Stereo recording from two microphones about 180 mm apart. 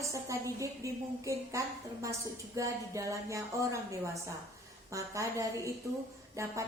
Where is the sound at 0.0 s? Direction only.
15° right (ahead or behind).